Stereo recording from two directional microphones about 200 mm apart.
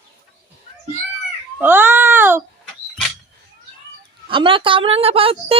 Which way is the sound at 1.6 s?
10° right (ahead or behind).